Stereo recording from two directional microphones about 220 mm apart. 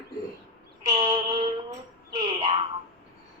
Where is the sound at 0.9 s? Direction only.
20° right (ahead or behind).